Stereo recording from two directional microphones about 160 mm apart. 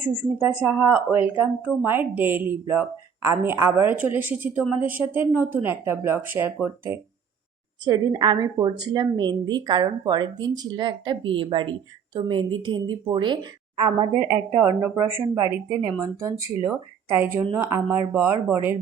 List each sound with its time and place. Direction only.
0.0 s speech: 10° right (ahead or behind)
7.9 s a woman's voice: 25° right (ahead or behind)
16.7 s speech: 10° right (ahead or behind)